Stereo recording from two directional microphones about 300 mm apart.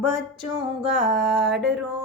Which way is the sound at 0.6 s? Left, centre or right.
Right.